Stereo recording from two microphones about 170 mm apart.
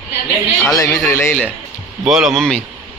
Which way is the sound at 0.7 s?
20° left (ahead or behind).